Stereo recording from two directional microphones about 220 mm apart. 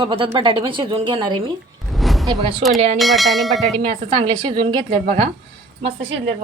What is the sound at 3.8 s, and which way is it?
A woman's voice, 25° right (ahead or behind).